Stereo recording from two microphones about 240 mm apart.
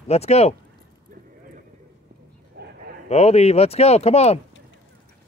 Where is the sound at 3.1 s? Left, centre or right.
Left.